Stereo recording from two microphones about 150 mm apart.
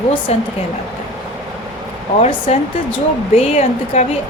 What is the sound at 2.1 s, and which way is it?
A woman's voice, 45° left (ahead or behind).